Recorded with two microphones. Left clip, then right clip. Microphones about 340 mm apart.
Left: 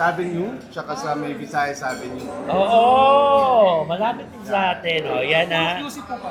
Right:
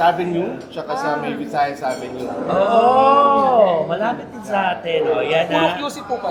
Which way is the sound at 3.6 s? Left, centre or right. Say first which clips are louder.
Right 1 dB; left.